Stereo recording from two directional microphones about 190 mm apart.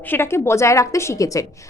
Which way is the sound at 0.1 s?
10° left (ahead or behind).